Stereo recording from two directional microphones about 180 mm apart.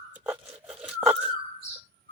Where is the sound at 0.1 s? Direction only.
5° right (ahead or behind).